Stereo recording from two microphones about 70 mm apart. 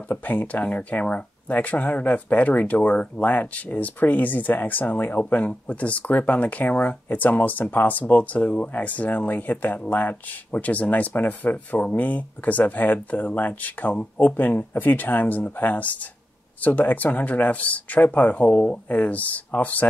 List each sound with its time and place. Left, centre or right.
0.1 s speech: left